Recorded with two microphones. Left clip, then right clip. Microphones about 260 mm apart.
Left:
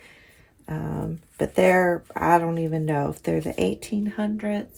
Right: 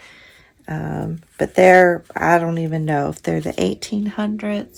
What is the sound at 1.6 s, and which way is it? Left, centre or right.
Speech, centre.